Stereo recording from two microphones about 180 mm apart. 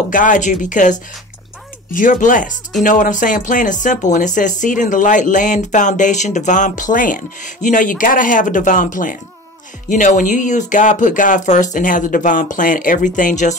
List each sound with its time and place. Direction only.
0.1 s speech: 45° left (ahead or behind)